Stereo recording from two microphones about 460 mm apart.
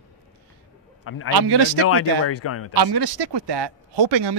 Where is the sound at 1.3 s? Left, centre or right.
Right.